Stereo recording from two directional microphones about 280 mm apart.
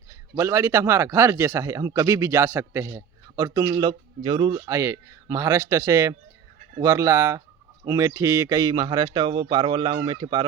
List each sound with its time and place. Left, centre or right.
0.1 s speech: centre